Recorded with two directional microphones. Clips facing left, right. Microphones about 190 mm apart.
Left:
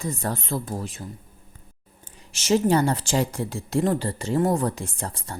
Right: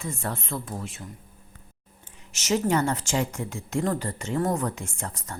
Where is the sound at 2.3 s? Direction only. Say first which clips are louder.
Left 4 dB; 30° left (ahead or behind).